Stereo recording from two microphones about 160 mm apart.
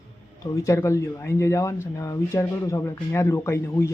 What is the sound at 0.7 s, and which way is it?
Speech, 20° left (ahead or behind).